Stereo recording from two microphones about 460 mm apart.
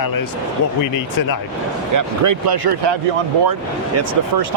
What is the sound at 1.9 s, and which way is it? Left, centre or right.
Speech, right.